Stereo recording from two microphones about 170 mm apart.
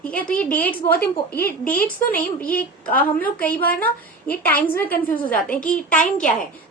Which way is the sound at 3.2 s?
10° left (ahead or behind).